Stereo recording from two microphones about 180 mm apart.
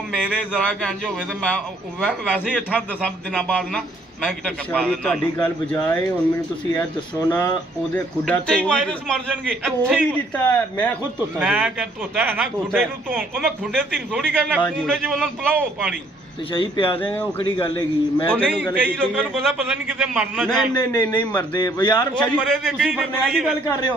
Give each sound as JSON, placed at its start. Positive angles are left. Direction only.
{"t": 0.1, "sound": "a man's voice", "side_deg": 0}
{"t": 5.0, "sound": "a man's voice", "side_deg": 5}
{"t": 15.5, "sound": "a man's voice", "side_deg": -10}
{"t": 16.5, "sound": "a man's voice", "side_deg": 30}
{"t": 18.3, "sound": "a man's voice", "side_deg": 5}
{"t": 20.7, "sound": "a man's voice", "side_deg": 20}
{"t": 22.2, "sound": "a man's voice", "side_deg": 0}